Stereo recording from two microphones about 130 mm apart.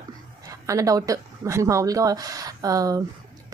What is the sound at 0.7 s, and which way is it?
A woman's voice, 25° right (ahead or behind).